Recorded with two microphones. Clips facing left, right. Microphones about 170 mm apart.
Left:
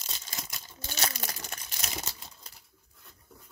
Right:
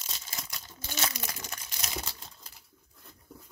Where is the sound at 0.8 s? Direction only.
40° left (ahead or behind).